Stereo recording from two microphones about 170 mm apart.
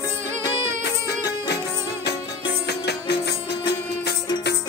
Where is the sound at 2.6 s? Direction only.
75° left (ahead or behind).